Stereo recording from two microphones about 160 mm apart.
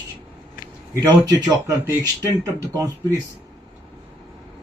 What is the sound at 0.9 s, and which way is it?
Speech, 25° right (ahead or behind).